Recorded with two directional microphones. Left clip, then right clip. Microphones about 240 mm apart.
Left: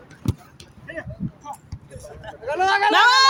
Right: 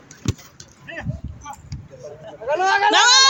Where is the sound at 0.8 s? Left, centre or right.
Right.